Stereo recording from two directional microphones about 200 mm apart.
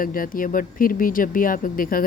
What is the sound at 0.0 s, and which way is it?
Speech, 45° left (ahead or behind).